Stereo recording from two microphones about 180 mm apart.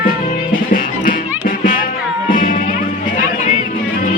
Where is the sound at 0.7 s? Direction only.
50° left (ahead or behind).